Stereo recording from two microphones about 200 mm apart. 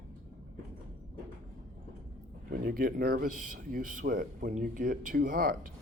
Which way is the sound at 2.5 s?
45° right (ahead or behind).